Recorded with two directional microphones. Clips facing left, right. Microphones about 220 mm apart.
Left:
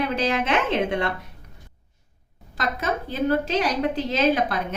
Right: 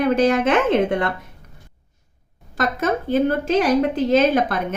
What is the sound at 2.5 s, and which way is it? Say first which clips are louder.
A woman's voice: right 5 dB; 50° right (ahead or behind).